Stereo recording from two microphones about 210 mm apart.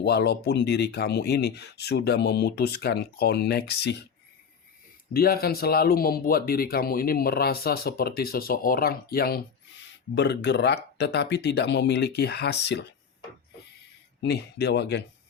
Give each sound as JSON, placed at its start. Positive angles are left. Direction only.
{"t": 0.0, "sound": "speech", "side_deg": 50}
{"t": 5.1, "sound": "speech", "side_deg": 45}
{"t": 14.2, "sound": "speech", "side_deg": 50}